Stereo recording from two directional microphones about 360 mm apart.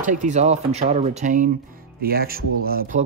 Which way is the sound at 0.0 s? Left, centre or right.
Centre.